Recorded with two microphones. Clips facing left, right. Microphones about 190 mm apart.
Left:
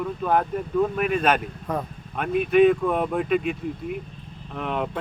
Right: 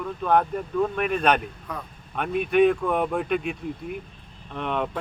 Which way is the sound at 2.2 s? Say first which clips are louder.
Left 2 dB; centre (ahead or behind).